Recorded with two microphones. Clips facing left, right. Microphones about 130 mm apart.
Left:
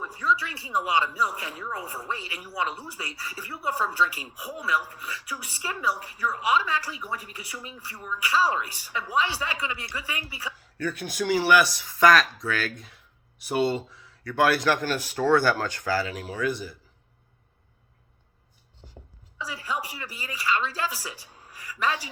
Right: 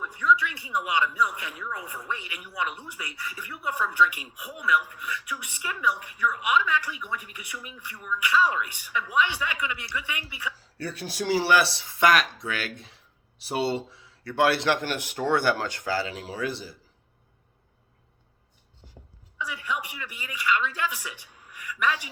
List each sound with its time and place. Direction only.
0.0 s speech: 30° left (ahead or behind)
10.6 s speech: 30° right (ahead or behind)
19.4 s speech: 35° left (ahead or behind)